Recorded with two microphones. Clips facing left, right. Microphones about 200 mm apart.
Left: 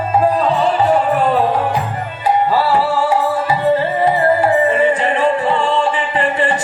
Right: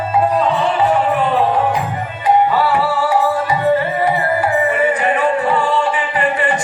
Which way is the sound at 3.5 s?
30° left (ahead or behind).